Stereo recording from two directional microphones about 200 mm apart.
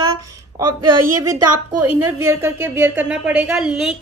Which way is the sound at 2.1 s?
10° right (ahead or behind).